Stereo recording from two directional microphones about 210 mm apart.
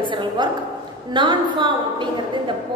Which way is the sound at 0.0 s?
20° right (ahead or behind).